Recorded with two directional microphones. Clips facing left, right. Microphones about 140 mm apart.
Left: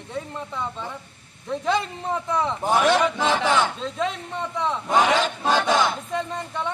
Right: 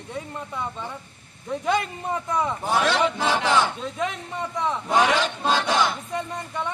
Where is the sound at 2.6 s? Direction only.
15° left (ahead or behind).